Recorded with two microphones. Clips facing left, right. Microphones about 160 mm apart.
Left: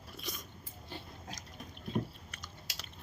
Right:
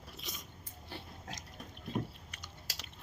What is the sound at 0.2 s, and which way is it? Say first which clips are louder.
Biting: left 5 dB; 20° right (ahead or behind).